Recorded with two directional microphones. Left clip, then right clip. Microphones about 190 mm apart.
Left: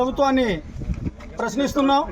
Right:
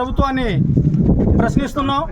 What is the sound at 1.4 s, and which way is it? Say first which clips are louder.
Speech: right 3 dB; 25° right (ahead or behind).